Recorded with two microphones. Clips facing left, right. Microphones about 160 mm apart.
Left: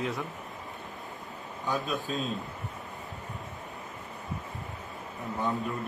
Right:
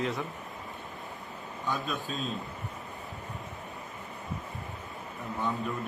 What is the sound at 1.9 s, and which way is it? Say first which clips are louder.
Speech: left 3 dB; 40° left (ahead or behind).